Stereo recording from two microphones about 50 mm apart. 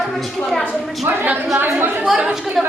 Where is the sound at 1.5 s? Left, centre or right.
Right.